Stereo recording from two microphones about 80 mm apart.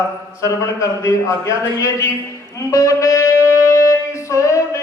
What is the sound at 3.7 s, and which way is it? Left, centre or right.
Music, left.